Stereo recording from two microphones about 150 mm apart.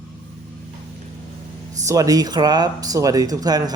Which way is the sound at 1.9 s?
25° right (ahead or behind).